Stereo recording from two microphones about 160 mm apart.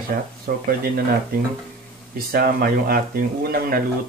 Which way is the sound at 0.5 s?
55° right (ahead or behind).